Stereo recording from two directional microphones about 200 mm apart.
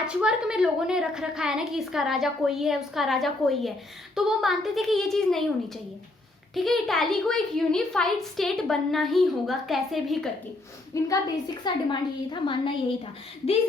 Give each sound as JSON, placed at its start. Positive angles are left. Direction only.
{"t": 0.1, "sound": "a child's voice", "side_deg": -5}
{"t": 10.9, "sound": "a woman's voice", "side_deg": 15}